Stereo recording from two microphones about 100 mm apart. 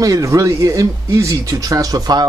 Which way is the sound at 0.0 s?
35° right (ahead or behind).